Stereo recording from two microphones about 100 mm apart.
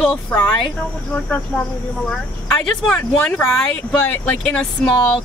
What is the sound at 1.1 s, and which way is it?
Speech, 10° left (ahead or behind).